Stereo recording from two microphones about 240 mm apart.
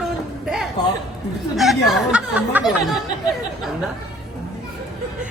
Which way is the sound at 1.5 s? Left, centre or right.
Centre.